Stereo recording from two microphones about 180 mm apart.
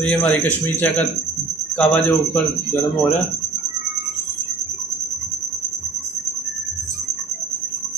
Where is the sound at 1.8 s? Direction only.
5° left (ahead or behind).